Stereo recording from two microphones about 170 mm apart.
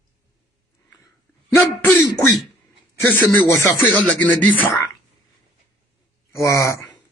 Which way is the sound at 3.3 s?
15° left (ahead or behind).